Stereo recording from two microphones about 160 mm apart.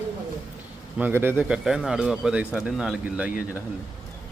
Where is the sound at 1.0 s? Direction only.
15° right (ahead or behind).